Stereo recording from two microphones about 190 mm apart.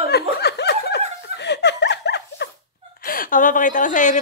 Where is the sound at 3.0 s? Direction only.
50° left (ahead or behind).